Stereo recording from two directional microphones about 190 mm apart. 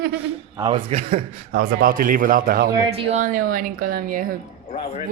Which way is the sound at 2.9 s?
35° right (ahead or behind).